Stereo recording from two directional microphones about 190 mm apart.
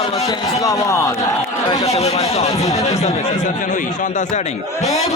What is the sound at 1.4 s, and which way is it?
Chatter, 30° left (ahead or behind).